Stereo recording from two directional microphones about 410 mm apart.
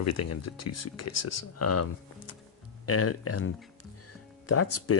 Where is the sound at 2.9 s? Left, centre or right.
Left.